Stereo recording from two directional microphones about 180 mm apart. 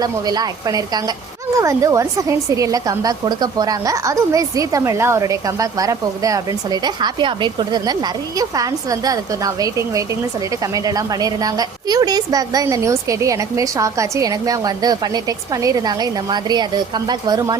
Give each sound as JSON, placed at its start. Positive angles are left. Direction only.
{"t": 0.0, "sound": "a woman's voice", "side_deg": -20}